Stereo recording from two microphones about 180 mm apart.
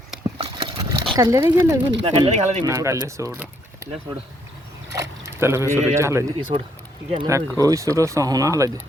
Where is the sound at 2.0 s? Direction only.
30° right (ahead or behind).